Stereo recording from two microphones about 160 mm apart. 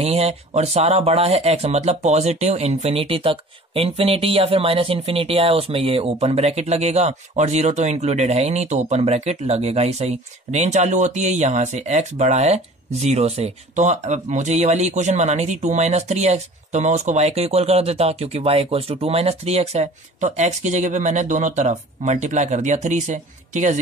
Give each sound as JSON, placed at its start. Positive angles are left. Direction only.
{"t": 0.0, "sound": "speech", "side_deg": -40}